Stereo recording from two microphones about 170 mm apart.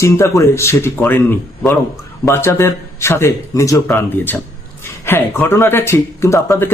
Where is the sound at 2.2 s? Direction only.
15° left (ahead or behind).